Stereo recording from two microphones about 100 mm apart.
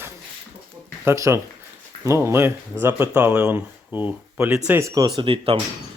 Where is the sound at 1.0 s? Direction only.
30° right (ahead or behind).